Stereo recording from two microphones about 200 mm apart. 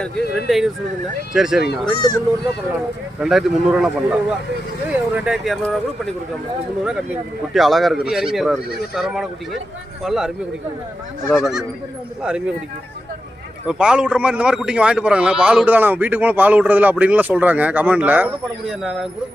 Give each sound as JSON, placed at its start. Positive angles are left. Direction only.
{"t": 0.0, "sound": "speech", "side_deg": 0}
{"t": 2.0, "sound": "speech", "side_deg": 20}
{"t": 3.2, "sound": "speech", "side_deg": -5}
{"t": 7.5, "sound": "speech", "side_deg": 0}
{"t": 13.7, "sound": "speech", "side_deg": -5}